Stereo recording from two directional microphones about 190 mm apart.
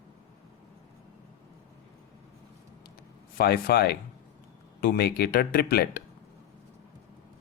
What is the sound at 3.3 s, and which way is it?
Speech, 55° left (ahead or behind).